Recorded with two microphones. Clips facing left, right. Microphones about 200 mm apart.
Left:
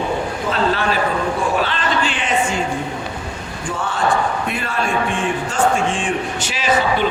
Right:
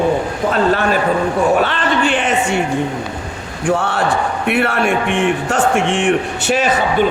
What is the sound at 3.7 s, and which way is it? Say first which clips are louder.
Speech: right 4 dB; 70° right (ahead or behind).